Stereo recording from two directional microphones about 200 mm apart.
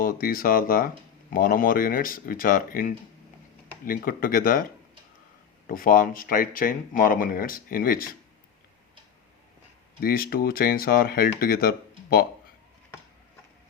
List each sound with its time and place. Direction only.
0.0 s speech: 45° left (ahead or behind)
5.6 s speech: 45° left (ahead or behind)
10.0 s speech: 50° left (ahead or behind)